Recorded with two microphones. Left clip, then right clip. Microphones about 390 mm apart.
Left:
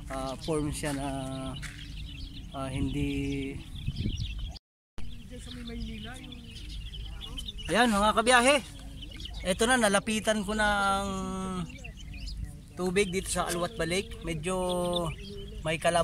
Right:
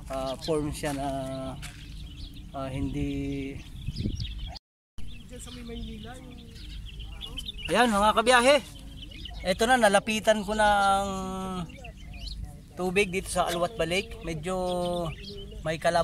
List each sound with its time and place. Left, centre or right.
0.1 s speech: centre
7.2 s speech: centre